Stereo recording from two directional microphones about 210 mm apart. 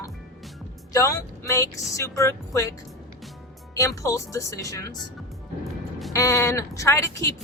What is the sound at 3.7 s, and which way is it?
Speech, 15° left (ahead or behind).